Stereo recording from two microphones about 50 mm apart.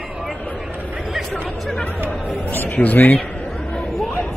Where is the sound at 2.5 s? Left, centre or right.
Left.